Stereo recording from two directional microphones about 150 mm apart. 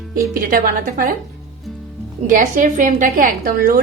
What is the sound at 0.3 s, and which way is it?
Speech, 65° right (ahead or behind).